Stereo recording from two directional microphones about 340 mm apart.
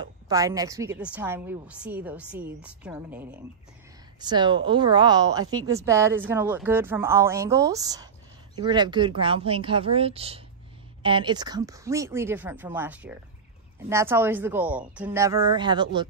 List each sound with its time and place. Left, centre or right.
0.0 s a woman's voice: centre